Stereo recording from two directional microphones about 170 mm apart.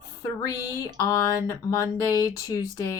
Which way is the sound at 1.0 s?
20° left (ahead or behind).